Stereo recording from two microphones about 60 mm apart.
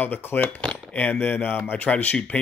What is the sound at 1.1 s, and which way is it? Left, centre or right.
Speech, left.